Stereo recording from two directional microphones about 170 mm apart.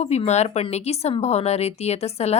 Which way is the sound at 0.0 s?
35° left (ahead or behind).